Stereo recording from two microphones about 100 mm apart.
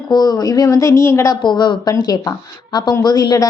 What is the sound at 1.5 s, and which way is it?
A woman's voice, 50° left (ahead or behind).